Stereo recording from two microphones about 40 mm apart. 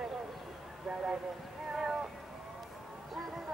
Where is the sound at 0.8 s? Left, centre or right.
Right.